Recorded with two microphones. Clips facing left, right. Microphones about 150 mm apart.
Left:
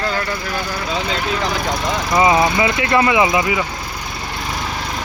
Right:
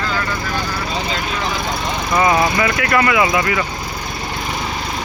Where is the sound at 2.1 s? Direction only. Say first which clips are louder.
Left 1 dB; 15° left (ahead or behind).